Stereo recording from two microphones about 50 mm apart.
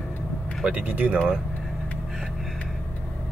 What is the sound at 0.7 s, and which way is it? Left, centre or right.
Speech, right.